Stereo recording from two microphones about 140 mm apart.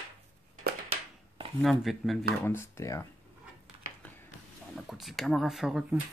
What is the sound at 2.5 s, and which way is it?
Speech, 20° left (ahead or behind).